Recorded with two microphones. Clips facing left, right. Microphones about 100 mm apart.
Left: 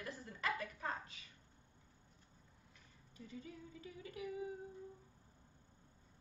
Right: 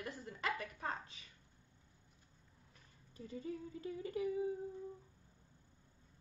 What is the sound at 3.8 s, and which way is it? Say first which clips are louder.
Speech: right 8 dB; 35° right (ahead or behind).